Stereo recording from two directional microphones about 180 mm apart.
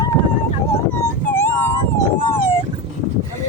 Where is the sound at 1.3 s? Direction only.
10° left (ahead or behind).